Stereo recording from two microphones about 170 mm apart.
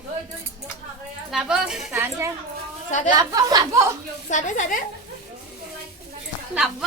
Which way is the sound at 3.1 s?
20° right (ahead or behind).